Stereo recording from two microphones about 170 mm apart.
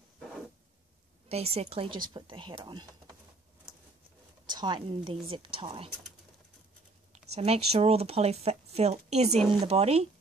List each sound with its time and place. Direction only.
1.3 s speech: 35° right (ahead or behind)
4.5 s a woman's voice: 25° right (ahead or behind)
7.1 s speech: 35° right (ahead or behind)